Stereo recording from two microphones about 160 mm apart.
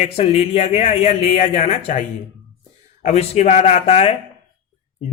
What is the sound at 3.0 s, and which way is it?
Speech, 45° left (ahead or behind).